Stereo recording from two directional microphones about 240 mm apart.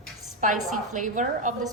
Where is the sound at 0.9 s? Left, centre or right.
Right.